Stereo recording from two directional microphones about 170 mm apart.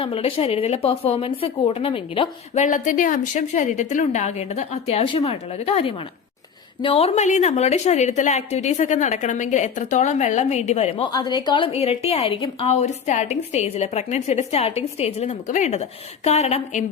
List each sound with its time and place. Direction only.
0.0 s a woman's voice: 35° left (ahead or behind)
2.6 s a woman's voice: 50° left (ahead or behind)
11.1 s a woman's voice: 25° left (ahead or behind); by 16.8 s 40° left (ahead or behind)